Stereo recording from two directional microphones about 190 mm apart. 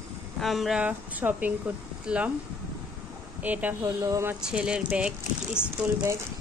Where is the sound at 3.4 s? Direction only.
10° right (ahead or behind).